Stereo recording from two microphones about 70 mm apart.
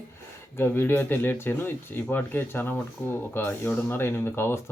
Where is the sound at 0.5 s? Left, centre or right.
Left.